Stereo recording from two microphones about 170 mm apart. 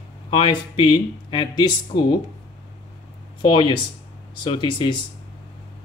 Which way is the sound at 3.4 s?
25° left (ahead or behind).